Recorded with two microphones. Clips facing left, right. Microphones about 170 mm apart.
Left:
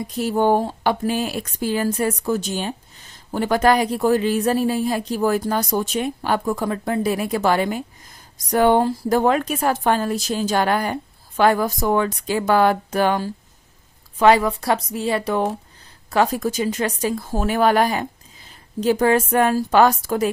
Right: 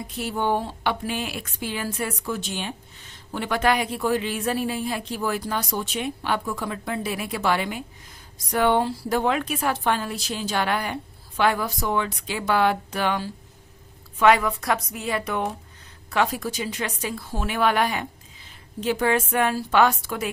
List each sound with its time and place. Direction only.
0.1 s a woman's voice: 40° left (ahead or behind)
14.2 s speech: 30° left (ahead or behind)